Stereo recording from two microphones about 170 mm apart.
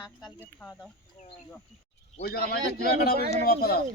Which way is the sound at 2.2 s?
70° left (ahead or behind).